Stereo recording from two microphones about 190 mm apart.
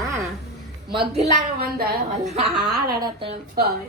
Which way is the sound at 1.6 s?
55° right (ahead or behind).